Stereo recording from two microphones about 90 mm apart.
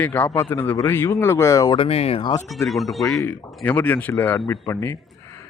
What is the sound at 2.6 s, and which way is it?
Speech, centre (ahead or behind).